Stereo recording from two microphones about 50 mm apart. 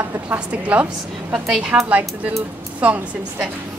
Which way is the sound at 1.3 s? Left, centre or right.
Centre.